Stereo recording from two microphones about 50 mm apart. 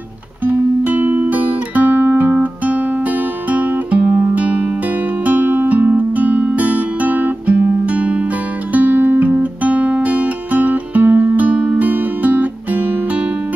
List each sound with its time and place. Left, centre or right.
0.5 s guitar: right
4.2 s music: right
8.7 s guitar: right